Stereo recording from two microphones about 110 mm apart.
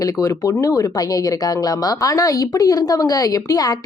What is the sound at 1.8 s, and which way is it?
A woman's voice, 30° left (ahead or behind).